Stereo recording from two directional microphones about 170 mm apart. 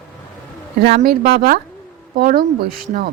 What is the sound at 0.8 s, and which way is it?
Speech, 65° right (ahead or behind).